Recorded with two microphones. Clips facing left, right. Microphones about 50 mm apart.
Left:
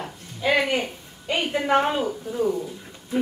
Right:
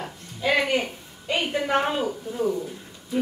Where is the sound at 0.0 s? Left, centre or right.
Centre.